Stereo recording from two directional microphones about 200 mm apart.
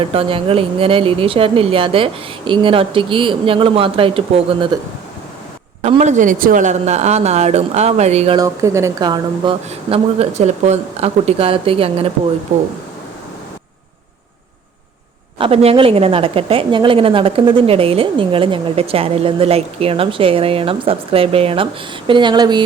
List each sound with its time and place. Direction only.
0.0 s a woman's voice: 25° right (ahead or behind)
5.8 s speech: 35° right (ahead or behind)
8.4 s a woman's voice: 15° right (ahead or behind)
15.4 s a woman's voice: 30° right (ahead or behind)